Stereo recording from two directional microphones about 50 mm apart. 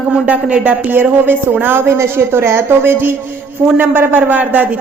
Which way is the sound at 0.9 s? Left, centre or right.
Right.